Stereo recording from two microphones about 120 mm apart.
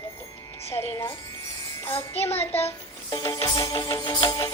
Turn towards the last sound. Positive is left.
turn(degrees=35)  # may be behind; listen again after turning